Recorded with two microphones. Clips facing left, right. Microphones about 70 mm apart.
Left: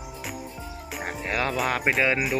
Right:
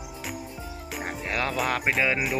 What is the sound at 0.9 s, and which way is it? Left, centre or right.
Speech, centre.